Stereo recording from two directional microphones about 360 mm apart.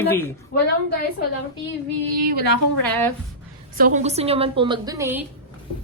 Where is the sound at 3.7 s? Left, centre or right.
Right; by 5.2 s centre.